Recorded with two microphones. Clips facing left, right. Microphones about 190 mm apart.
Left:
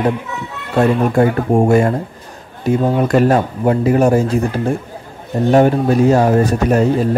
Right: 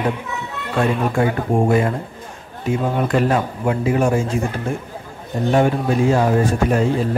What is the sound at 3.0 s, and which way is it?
Speech, 40° left (ahead or behind).